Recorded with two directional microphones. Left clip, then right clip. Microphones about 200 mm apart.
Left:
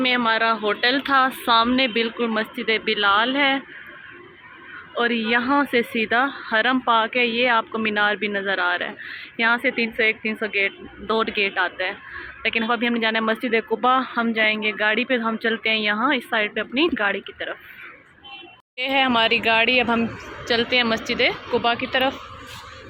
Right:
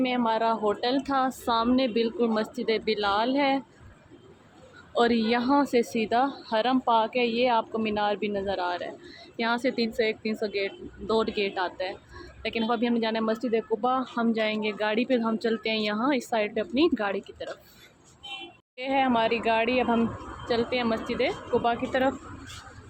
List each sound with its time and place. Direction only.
0.0 s a woman's voice: 10° right (ahead or behind)
4.9 s a woman's voice: 20° right (ahead or behind)
18.8 s speech: centre (ahead or behind)